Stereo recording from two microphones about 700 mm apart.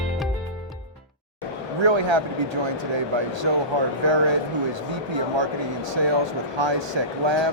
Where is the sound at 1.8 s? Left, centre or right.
Right.